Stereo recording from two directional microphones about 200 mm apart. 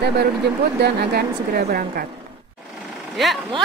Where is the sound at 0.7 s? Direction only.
55° right (ahead or behind).